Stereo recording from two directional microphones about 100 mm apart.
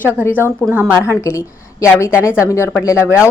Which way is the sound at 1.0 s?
30° left (ahead or behind).